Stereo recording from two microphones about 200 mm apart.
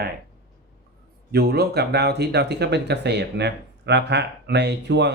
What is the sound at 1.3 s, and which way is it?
Speech, 50° right (ahead or behind).